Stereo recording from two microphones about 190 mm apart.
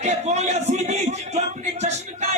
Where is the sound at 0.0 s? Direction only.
35° right (ahead or behind).